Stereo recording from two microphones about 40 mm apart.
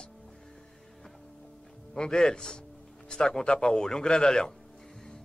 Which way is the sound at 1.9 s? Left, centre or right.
Centre.